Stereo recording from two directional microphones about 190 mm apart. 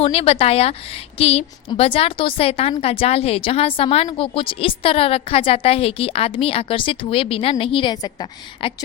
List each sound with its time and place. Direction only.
0.0 s a woman's voice: 30° left (ahead or behind)